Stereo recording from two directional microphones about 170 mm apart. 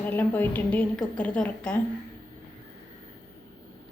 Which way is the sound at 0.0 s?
10° left (ahead or behind).